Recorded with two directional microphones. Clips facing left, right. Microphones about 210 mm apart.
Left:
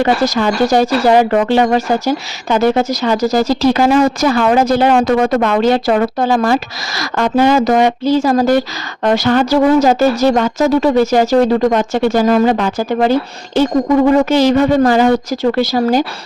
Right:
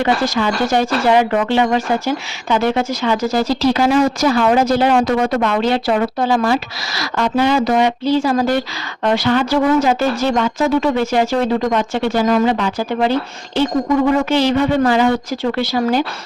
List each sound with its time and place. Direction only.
0.0 s speech: 40° left (ahead or behind)